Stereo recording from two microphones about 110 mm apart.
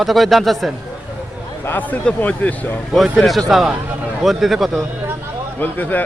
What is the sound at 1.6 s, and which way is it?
A man's voice, 15° left (ahead or behind).